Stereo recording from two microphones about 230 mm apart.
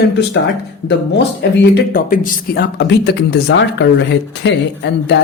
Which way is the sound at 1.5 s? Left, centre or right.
Left.